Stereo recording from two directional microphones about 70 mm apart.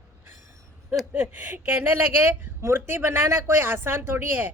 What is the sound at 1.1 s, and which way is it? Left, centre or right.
A woman's voice, right.